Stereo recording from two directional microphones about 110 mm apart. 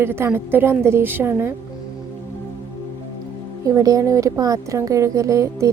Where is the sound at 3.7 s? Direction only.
30° right (ahead or behind).